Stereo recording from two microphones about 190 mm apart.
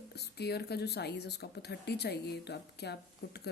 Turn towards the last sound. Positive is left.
turn(degrees=60)  # may be behind; listen again after turning